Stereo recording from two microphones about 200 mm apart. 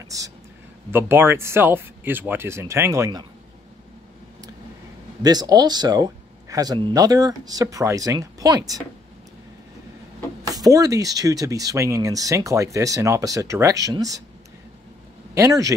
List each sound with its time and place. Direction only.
0.9 s speech: 10° right (ahead or behind)
5.2 s speech: 20° right (ahead or behind)
10.4 s speech: 20° right (ahead or behind)
15.3 s speech: 15° right (ahead or behind)